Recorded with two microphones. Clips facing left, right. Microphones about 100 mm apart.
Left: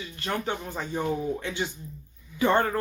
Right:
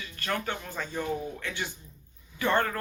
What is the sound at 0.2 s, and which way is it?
Speech, 20° left (ahead or behind).